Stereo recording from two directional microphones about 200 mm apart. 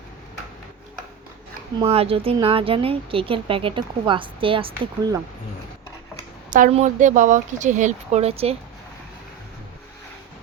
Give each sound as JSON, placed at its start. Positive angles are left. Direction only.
{"t": 1.8, "sound": "speech", "side_deg": -30}
{"t": 6.5, "sound": "a woman's voice", "side_deg": -35}